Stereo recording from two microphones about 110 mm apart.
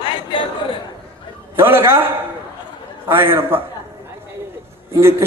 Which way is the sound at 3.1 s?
20° right (ahead or behind).